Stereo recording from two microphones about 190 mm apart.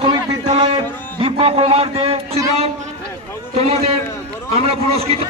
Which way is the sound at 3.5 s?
35° right (ahead or behind).